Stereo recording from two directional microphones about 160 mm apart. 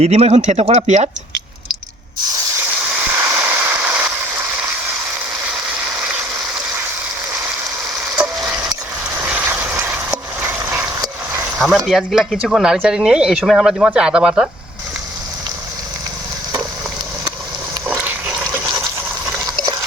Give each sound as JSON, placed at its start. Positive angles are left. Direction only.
{"t": 0.0, "sound": "speech", "side_deg": -40}
{"t": 3.1, "sound": "a sound", "side_deg": -15}
{"t": 8.4, "sound": "a sound", "side_deg": -10}
{"t": 11.9, "sound": "speech", "side_deg": 0}
{"t": 17.8, "sound": "water", "side_deg": -10}
{"t": 18.6, "sound": "water", "side_deg": -25}